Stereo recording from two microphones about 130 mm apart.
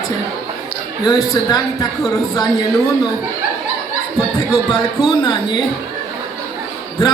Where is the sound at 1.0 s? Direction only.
30° left (ahead or behind).